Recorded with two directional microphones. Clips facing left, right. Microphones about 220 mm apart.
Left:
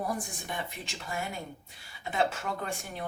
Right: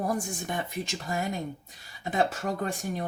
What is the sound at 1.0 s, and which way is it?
Speech, 40° right (ahead or behind).